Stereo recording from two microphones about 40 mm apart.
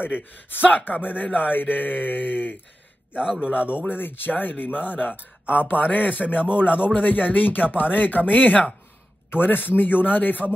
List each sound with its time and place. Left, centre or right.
0.0 s speech: left
3.1 s a man's voice: right
3.9 s speech: left
9.3 s a man's voice: left